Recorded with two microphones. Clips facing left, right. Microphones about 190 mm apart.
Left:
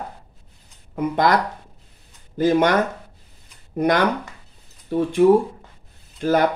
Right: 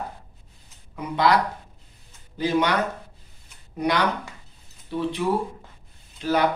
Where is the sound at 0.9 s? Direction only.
50° left (ahead or behind).